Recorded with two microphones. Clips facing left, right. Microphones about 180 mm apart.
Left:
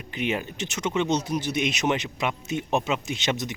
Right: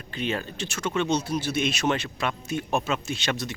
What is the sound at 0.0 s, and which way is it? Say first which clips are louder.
A man's voice: left 1 dB; 20° left (ahead or behind).